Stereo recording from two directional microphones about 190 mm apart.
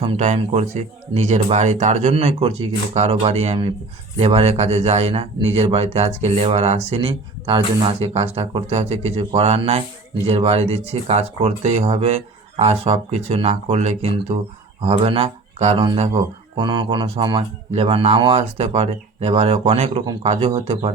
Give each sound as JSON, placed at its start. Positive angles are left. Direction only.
{"t": 0.0, "sound": "speech", "side_deg": -35}